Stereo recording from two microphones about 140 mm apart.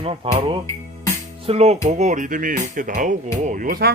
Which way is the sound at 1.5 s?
50° right (ahead or behind).